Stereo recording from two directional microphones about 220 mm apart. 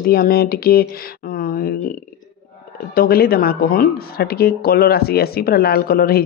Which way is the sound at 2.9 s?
45° left (ahead or behind).